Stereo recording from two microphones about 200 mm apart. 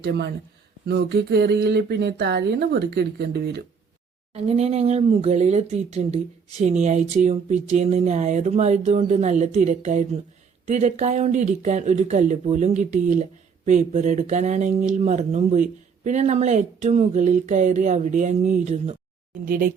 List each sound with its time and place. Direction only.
0.0 s speech: 60° right (ahead or behind)
4.4 s speech: 30° right (ahead or behind)
19.5 s speech: 45° right (ahead or behind)